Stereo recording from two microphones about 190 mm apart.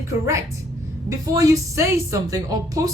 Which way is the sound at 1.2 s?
15° right (ahead or behind).